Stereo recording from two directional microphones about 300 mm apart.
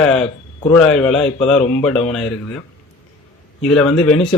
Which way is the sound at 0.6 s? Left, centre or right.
Centre.